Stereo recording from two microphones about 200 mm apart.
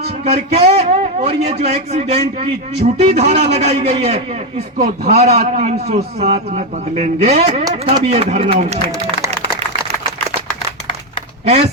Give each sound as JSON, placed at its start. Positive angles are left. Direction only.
{"t": 0.3, "sound": "a man's voice", "side_deg": -30}